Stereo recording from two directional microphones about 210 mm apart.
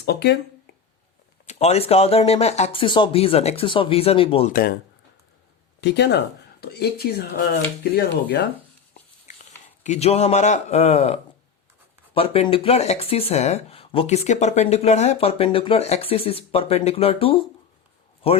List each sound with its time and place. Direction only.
0.0 s speech: 50° left (ahead or behind)
1.5 s speech: 30° left (ahead or behind)
5.8 s speech: 55° left (ahead or behind)
9.8 s a man's voice: 30° left (ahead or behind)